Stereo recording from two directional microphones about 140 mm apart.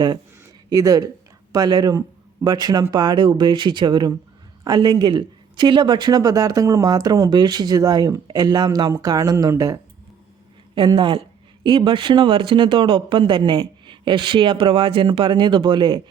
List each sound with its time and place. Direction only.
0.4 s a sound: 25° right (ahead or behind)
1.5 s speech: 30° right (ahead or behind)
10.8 s speech: 35° right (ahead or behind)